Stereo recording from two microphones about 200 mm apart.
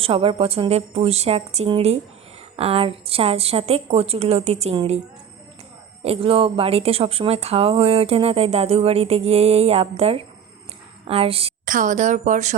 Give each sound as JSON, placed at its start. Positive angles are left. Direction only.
{"t": 0.0, "sound": "speech", "side_deg": -30}
{"t": 6.0, "sound": "a woman's voice", "side_deg": -30}
{"t": 11.6, "sound": "speech", "side_deg": -40}